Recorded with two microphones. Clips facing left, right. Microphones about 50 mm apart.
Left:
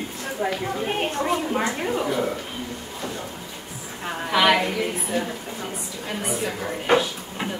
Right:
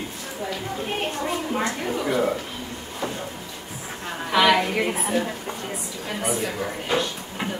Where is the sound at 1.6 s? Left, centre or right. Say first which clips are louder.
Left 1 dB; centre.